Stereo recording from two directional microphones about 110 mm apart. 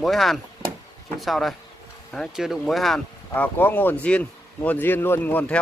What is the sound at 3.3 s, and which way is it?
Speech, 15° left (ahead or behind).